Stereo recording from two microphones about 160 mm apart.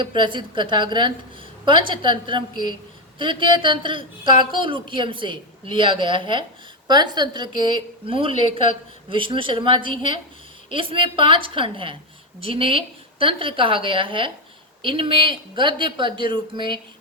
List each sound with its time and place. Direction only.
0.0 s a woman's voice: 30° right (ahead or behind)